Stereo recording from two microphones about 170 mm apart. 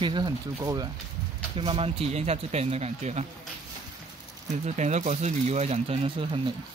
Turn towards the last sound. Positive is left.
turn(degrees=-30)  # may be behind; listen again after turning